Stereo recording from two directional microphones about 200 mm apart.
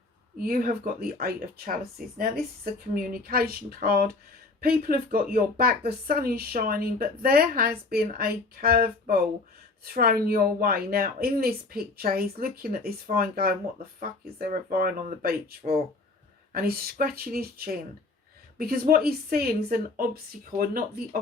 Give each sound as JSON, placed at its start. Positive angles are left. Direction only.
{"t": 0.4, "sound": "speech", "side_deg": -45}